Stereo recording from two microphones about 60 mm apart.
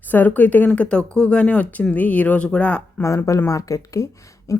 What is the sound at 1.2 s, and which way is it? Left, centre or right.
Speech, centre.